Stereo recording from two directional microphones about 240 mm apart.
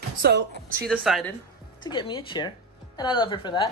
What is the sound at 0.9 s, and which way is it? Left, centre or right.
Speech, centre.